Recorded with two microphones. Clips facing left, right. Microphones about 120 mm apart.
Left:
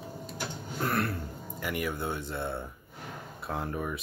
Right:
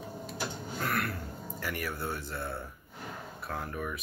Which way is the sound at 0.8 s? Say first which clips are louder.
Left 3 dB; 30° left (ahead or behind).